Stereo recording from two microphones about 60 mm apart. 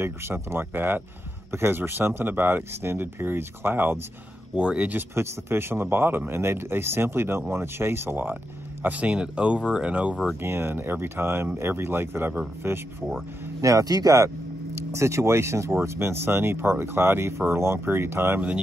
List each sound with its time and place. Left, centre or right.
0.0 s speech: right
4.6 s speech: right
4.9 s speech: right
8.8 s speech: right
9.1 s speech: centre
10.4 s speech: right
13.6 s speech: right
14.8 s speech: right